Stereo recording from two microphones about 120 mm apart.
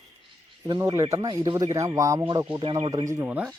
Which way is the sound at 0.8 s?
30° right (ahead or behind).